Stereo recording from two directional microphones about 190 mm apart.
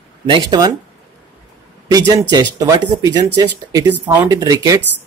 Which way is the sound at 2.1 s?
20° right (ahead or behind).